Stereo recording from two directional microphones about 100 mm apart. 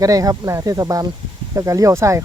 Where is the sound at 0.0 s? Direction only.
35° right (ahead or behind).